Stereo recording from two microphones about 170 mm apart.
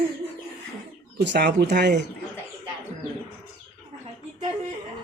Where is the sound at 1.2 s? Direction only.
85° right.